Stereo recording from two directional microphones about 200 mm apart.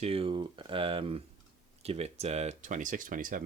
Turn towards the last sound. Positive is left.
turn(degrees=-45)  # may be behind; listen again after turning